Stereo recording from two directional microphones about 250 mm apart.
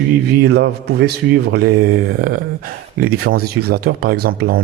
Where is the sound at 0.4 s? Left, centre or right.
Right.